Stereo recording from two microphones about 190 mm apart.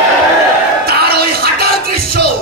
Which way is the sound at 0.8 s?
55° right (ahead or behind).